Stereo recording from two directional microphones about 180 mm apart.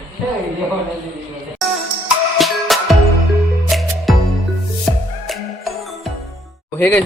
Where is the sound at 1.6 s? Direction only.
Centre (ahead or behind).